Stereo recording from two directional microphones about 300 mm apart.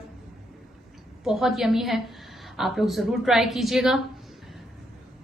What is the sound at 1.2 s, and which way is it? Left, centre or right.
A woman's voice, centre.